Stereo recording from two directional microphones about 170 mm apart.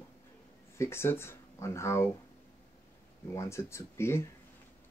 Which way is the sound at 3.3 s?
15° left (ahead or behind).